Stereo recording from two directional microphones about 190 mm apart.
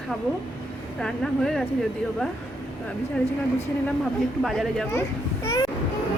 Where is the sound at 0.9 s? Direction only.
5° left (ahead or behind).